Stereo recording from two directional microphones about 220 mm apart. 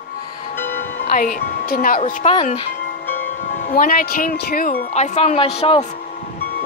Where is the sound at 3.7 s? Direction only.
40° left (ahead or behind).